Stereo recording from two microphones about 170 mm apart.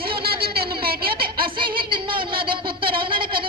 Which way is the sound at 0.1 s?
65° right (ahead or behind).